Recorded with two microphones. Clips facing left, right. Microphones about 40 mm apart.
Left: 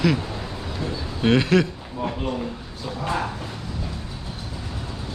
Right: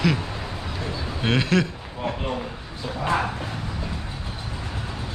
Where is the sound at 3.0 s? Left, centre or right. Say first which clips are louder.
Right 2 dB; centre.